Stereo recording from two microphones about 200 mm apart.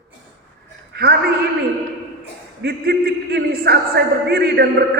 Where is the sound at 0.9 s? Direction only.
55° right (ahead or behind).